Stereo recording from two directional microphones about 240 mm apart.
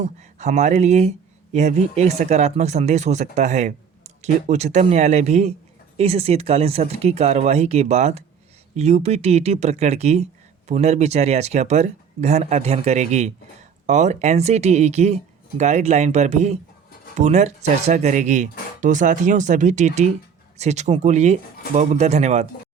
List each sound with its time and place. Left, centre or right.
0.0 s speech: right